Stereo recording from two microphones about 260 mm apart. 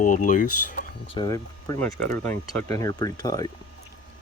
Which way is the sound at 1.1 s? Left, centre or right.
Centre.